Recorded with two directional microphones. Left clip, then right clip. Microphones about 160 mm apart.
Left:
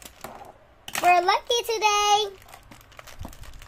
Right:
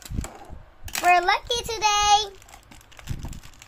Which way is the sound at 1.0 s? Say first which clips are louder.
Even; 10° left (ahead or behind).